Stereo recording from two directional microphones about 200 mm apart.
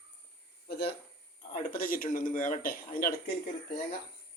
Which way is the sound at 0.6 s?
50° left (ahead or behind).